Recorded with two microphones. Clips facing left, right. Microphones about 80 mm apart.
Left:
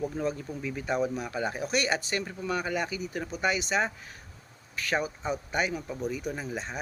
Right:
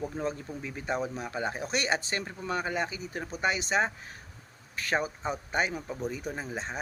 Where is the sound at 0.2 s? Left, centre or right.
Right.